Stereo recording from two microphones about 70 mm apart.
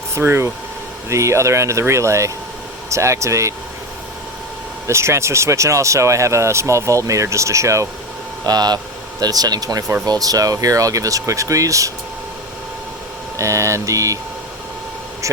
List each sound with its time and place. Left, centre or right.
0.1 s speech: right
4.9 s speech: right
8.4 s speech: right
13.4 s speech: right